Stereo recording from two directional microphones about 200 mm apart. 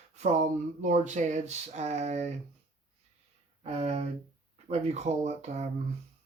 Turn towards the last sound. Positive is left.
turn(degrees=-35)  # may be behind; listen again after turning